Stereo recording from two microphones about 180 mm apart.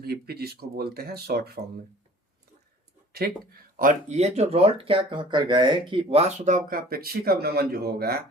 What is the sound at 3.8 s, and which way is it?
Speech, 40° right (ahead or behind).